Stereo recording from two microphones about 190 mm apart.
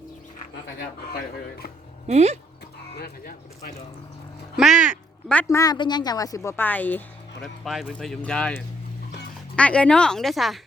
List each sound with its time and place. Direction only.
1.1 s speech: 55° left (ahead or behind)
2.0 s speech: 35° right (ahead or behind)
2.9 s music: 55° left (ahead or behind)
4.5 s speech: centre (ahead or behind)